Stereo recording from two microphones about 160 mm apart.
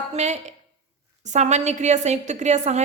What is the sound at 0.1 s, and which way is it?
A woman's voice, 45° right (ahead or behind).